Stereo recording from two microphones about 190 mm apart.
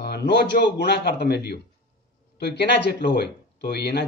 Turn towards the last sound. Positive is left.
turn(degrees=60)  # may be behind; listen again after turning